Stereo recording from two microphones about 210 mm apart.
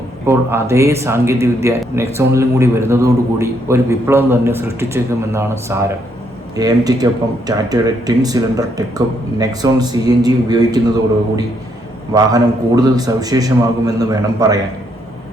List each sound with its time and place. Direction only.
0.3 s a man's voice: 10° right (ahead or behind)
12.1 s a man's voice: 15° right (ahead or behind)